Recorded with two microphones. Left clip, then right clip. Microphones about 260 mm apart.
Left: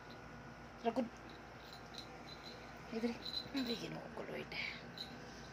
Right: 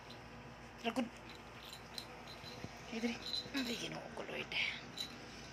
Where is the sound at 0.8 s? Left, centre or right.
Left.